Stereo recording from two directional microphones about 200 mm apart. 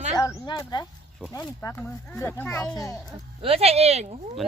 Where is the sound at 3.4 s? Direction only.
30° right (ahead or behind).